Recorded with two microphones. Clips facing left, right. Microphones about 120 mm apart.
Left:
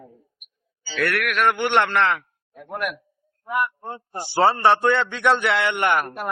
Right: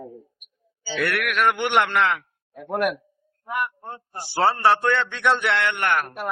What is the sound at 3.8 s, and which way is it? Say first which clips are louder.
A man's voice: left 4 dB; 5° left (ahead or behind).